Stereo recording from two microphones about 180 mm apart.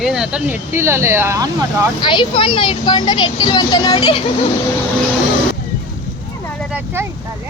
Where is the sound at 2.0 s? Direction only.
25° left (ahead or behind).